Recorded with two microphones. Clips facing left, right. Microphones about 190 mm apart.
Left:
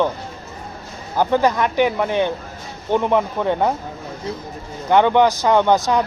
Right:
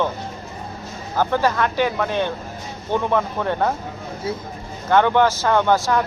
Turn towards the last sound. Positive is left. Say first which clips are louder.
# left 2 dB
turn(degrees=20)  # may be behind; listen again after turning